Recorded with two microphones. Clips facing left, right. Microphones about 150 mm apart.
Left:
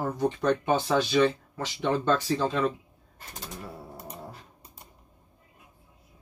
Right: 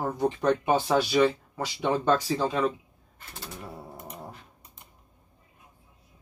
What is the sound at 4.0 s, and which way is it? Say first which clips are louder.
Dog: even; 35° left (ahead or behind).